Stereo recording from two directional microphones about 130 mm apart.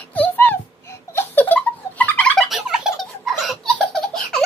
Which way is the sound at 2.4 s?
5° right (ahead or behind).